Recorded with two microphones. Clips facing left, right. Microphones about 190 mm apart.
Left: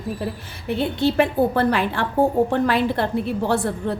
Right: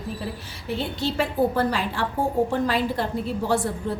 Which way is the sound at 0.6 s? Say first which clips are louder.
Left 6 dB; 60° left (ahead or behind).